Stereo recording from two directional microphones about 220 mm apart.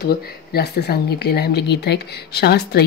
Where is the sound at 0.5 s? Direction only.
45° left (ahead or behind).